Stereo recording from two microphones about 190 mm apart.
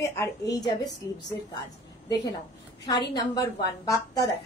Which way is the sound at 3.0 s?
20° left (ahead or behind).